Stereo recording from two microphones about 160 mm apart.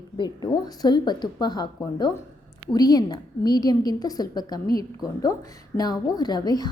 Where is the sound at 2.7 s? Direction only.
25° left (ahead or behind).